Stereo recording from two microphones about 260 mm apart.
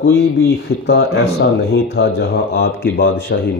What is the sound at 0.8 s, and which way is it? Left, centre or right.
Speech, left.